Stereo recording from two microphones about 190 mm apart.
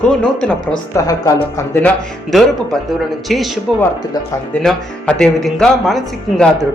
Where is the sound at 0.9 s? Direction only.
15° left (ahead or behind).